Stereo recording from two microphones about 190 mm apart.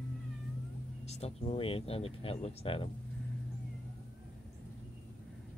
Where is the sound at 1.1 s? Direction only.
35° left (ahead or behind).